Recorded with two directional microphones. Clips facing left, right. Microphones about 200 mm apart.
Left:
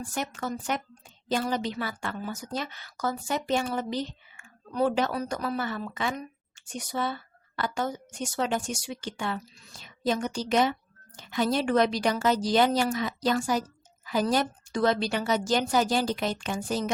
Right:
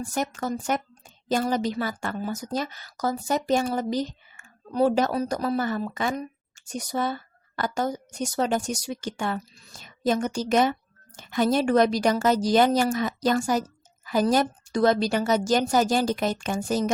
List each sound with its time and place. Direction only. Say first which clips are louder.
0.0 s a woman's voice: right 4 dB; 40° right (ahead or behind)